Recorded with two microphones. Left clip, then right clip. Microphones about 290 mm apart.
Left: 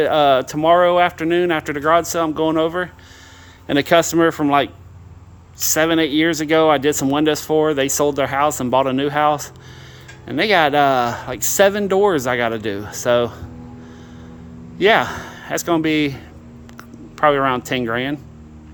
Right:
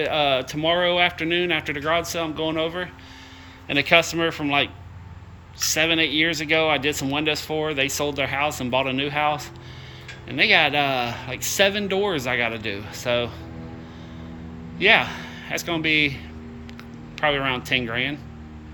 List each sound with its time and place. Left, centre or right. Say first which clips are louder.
0.0 s speech: left 7 dB; left
14.8 s speech: left 3 dB; left